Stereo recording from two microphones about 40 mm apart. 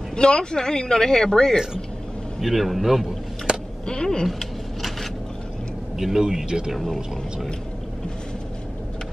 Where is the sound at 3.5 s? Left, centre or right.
Centre.